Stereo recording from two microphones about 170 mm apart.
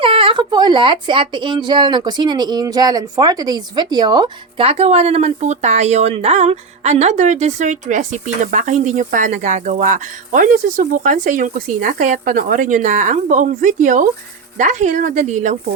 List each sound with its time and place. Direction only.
0.0 s speech: 30° right (ahead or behind); by 15.5 s 45° right (ahead or behind)